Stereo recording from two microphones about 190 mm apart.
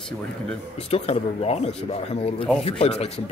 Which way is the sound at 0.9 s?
30° left (ahead or behind).